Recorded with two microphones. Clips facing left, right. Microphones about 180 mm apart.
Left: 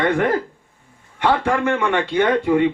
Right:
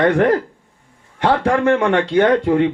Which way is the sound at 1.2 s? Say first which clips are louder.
Right 3 dB; 40° right (ahead or behind).